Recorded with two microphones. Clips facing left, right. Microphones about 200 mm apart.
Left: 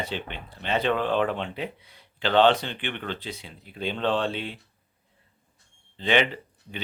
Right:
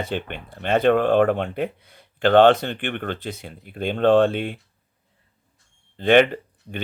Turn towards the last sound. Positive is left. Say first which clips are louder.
# right 6 dB
turn(degrees=-50)  # may be behind; listen again after turning